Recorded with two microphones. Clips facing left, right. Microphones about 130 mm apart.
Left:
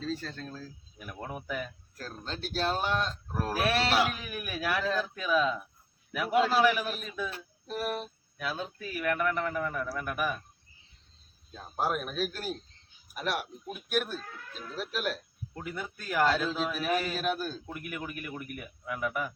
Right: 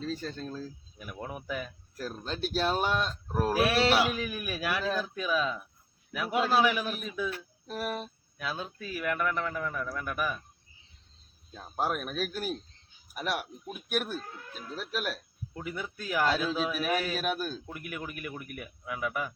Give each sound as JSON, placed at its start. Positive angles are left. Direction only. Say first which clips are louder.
{"t": 0.0, "sound": "speech", "louder": "right 1 dB", "side_deg": -15}
{"t": 1.0, "sound": "speech", "louder": "even", "side_deg": -5}
{"t": 11.8, "sound": "speech", "louder": "left 1 dB", "side_deg": 0}
{"t": 14.2, "sound": "speech", "louder": "right 1 dB", "side_deg": -20}
{"t": 15.0, "sound": "speech", "louder": "left 2 dB", "side_deg": -5}